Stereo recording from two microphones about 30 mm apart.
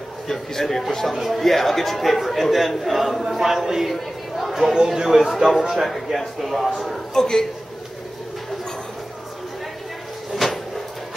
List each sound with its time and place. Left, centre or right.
0.3 s a man's voice: centre
1.1 s a man's voice: centre
1.4 s speech: centre
3.3 s a man's voice: centre
3.8 s chatter: centre
4.7 s a man's voice: centre
6.1 s speech: centre
7.2 s a man's voice: left
10.3 s cupboard open or close: centre